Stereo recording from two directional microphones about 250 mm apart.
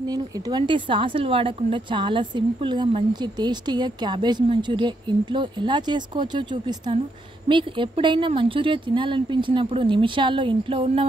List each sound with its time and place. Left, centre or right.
0.0 s a woman's voice: centre